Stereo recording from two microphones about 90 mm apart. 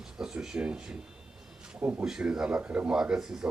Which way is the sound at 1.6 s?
15° right (ahead or behind).